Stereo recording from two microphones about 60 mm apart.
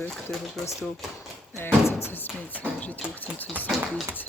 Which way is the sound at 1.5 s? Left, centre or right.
Left.